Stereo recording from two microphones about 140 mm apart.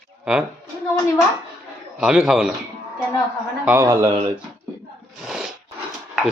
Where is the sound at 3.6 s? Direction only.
20° right (ahead or behind).